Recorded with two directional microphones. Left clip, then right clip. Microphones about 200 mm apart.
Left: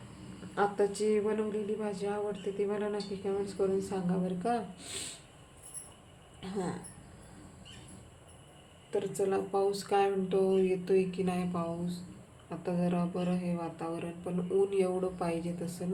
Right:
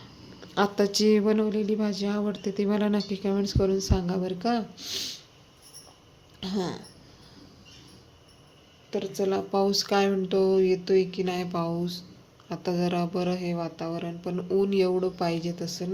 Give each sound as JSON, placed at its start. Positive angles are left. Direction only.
{"t": 0.5, "sound": "speech", "side_deg": -45}
{"t": 6.4, "sound": "speech", "side_deg": -40}
{"t": 8.9, "sound": "speech", "side_deg": -40}